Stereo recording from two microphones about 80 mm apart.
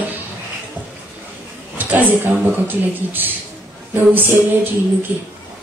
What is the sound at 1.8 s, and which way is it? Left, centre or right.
A woman's voice, right.